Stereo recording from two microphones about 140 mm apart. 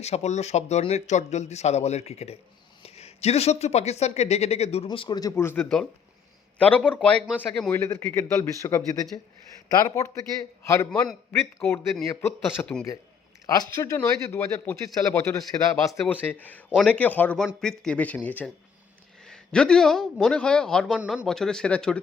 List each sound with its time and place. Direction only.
0.0 s speech: 50° left (ahead or behind)
4.9 s speech: 30° left (ahead or behind)
5.4 s a man's voice: 15° left (ahead or behind)
21.0 s speech: 10° right (ahead or behind)
21.2 s a man's voice: 5° left (ahead or behind)